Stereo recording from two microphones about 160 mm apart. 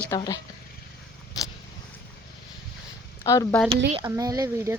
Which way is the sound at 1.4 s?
25° left (ahead or behind).